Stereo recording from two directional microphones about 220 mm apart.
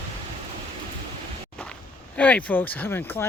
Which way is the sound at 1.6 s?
5° left (ahead or behind).